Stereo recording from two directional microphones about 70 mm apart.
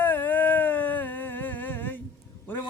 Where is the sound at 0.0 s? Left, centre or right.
Left.